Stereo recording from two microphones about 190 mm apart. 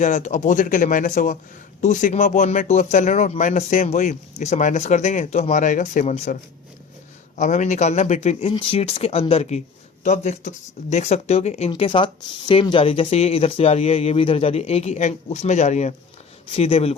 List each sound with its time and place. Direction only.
0.0 s speech: 40° left (ahead or behind)
7.3 s speech: 40° left (ahead or behind)